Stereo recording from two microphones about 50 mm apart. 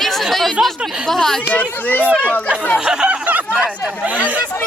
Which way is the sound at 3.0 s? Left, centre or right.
Right.